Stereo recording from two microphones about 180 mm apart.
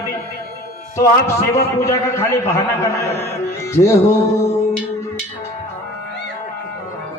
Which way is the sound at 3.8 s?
25° left (ahead or behind).